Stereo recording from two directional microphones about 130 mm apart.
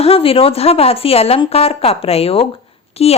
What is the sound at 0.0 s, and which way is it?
A woman's voice, 45° left (ahead or behind).